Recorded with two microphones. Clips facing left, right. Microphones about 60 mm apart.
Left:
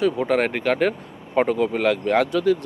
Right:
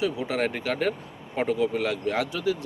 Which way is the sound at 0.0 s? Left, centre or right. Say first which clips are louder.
Left 6 dB; left.